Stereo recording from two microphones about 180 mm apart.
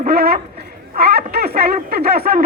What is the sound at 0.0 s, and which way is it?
Speech, 60° right (ahead or behind).